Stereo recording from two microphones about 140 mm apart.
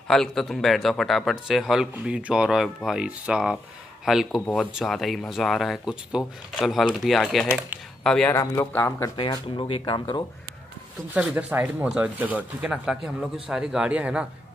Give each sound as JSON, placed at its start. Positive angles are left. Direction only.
{"t": 0.1, "sound": "a man's voice", "side_deg": 5}
{"t": 8.3, "sound": "speech", "side_deg": 20}
{"t": 9.1, "sound": "speech", "side_deg": 35}
{"t": 11.1, "sound": "speech", "side_deg": -10}